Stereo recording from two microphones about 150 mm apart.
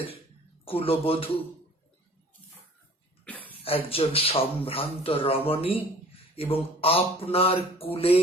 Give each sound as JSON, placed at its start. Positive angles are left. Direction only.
{"t": 0.6, "sound": "a man's voice", "side_deg": 40}
{"t": 3.2, "sound": "a sound", "side_deg": 10}
{"t": 3.6, "sound": "a man's voice", "side_deg": 40}